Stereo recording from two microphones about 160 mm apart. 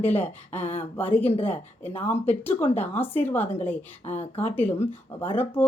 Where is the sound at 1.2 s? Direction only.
40° left (ahead or behind).